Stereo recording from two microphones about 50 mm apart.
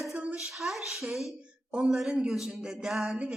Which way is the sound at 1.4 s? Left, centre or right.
Centre.